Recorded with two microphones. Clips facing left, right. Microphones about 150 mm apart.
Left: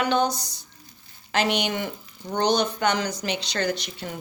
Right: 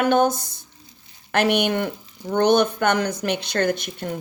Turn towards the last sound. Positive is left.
turn(degrees=-50)  # may be behind; listen again after turning